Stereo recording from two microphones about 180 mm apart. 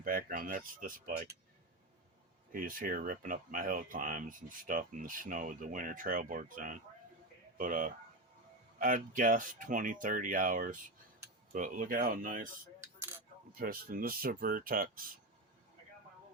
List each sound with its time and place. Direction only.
0.0 s speech: 50° right (ahead or behind)
2.5 s speech: 50° right (ahead or behind)
13.5 s speech: 55° right (ahead or behind)